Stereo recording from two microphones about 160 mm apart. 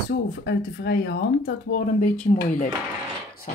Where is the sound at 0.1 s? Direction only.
90° left; by 2.1 s 60° left (ahead or behind).